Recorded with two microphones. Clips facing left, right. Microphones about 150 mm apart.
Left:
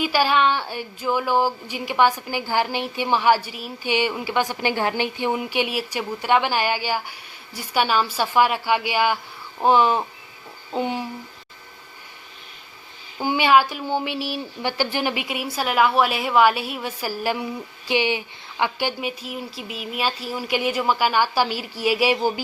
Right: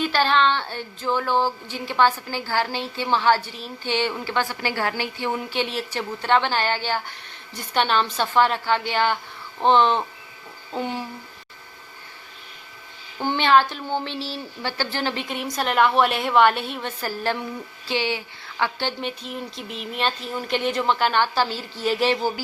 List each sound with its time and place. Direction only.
0.0 s a woman's voice: 10° left (ahead or behind)
10.8 s a sound: 15° left (ahead or behind)
13.1 s a woman's voice: 10° left (ahead or behind)